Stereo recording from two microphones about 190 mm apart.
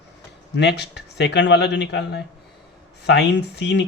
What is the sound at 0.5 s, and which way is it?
Speech, 65° left (ahead or behind).